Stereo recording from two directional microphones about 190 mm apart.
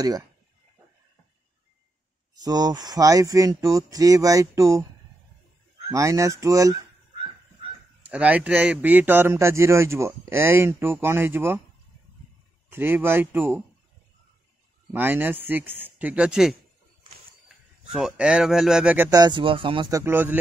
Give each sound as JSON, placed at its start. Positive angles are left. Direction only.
{"t": 2.4, "sound": "a man's voice", "side_deg": -20}
{"t": 5.9, "sound": "goose", "side_deg": -15}
{"t": 8.0, "sound": "a man's voice", "side_deg": -5}
{"t": 12.6, "sound": "a man's voice", "side_deg": -10}
{"t": 14.9, "sound": "a man's voice", "side_deg": -10}
{"t": 17.9, "sound": "speech", "side_deg": -5}
{"t": 19.0, "sound": "speech", "side_deg": -20}